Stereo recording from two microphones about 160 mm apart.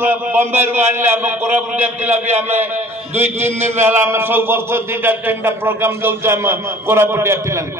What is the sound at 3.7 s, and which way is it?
A man's voice, 15° right (ahead or behind).